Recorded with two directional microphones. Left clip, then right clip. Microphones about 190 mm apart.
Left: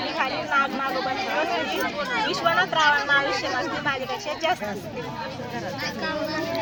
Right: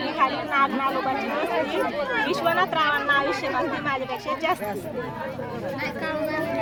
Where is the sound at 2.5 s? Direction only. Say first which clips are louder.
Left 3 dB; 20° right (ahead or behind).